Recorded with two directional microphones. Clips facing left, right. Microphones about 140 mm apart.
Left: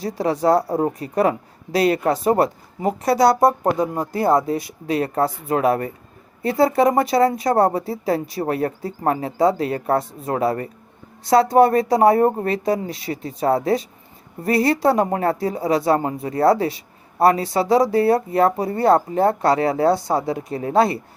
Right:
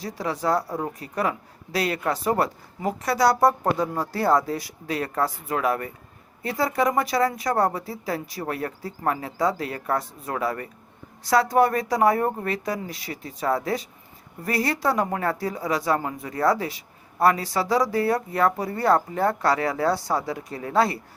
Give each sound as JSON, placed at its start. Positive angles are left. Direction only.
{"t": 0.0, "sound": "a woman's voice", "side_deg": 25}